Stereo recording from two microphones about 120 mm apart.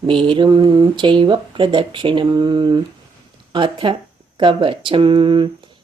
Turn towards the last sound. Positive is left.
turn(degrees=-40)  # may be behind; listen again after turning